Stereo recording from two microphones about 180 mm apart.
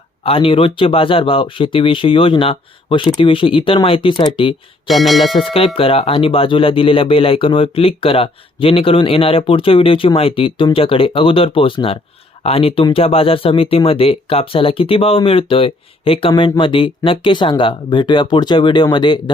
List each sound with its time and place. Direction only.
0.2 s speech: 30° left (ahead or behind)
4.9 s speech: centre (ahead or behind)
5.5 s speech: 30° left (ahead or behind)